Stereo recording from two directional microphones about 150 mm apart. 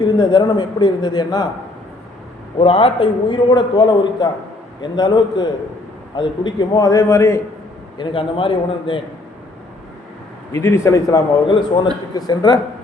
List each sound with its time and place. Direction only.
0.2 s a man's voice: 30° left (ahead or behind)
2.6 s a man's voice: 40° left (ahead or behind); by 7.4 s 20° left (ahead or behind)
7.9 s a man's voice: 35° left (ahead or behind)
10.5 s a man's voice: 20° left (ahead or behind)